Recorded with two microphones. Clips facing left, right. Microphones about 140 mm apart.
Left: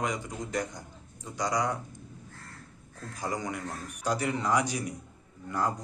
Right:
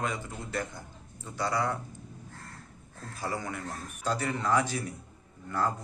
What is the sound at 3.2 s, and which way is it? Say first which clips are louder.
Speech: left 1 dB; 15° left (ahead or behind).